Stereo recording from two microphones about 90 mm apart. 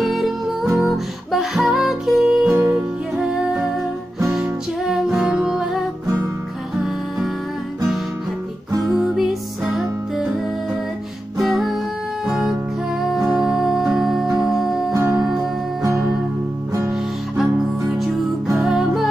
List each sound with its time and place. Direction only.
0.0 s music: centre (ahead or behind)
2.5 s music: 25° right (ahead or behind)
5.0 s music: 5° right (ahead or behind)
8.8 s music: 5° right (ahead or behind)
11.3 s music: 5° right (ahead or behind)
16.9 s music: centre (ahead or behind)